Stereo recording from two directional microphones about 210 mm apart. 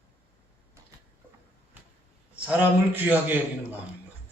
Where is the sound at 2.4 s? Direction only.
10° right (ahead or behind).